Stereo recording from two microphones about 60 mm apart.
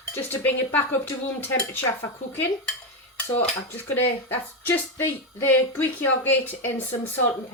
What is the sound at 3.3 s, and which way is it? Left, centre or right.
Dishes, left.